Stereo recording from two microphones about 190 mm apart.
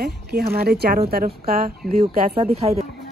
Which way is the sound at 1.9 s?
35° right (ahead or behind).